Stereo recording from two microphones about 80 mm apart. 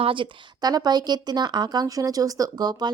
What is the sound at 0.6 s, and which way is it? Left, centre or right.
A woman's voice, right.